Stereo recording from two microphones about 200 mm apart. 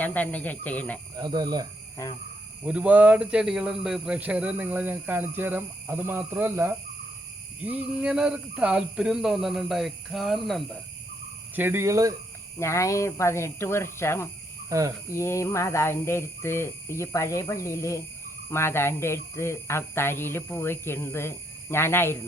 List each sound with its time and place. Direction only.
0.0 s speech: 10° left (ahead or behind)
1.1 s speech: 20° right (ahead or behind)
2.0 s speech: 15° left (ahead or behind)
2.6 s speech: 5° right (ahead or behind)
11.5 s speech: 10° right (ahead or behind)
12.5 s speech: 15° left (ahead or behind)
14.7 s speech: 15° right (ahead or behind)
15.1 s speech: 15° left (ahead or behind)